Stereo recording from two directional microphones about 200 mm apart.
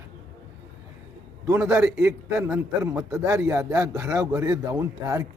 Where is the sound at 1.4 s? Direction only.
10° right (ahead or behind).